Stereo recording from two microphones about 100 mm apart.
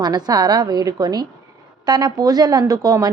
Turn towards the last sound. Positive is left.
turn(degrees=-35)  # may be behind; listen again after turning